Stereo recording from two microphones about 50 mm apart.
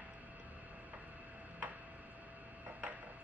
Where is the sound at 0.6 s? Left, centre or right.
Right.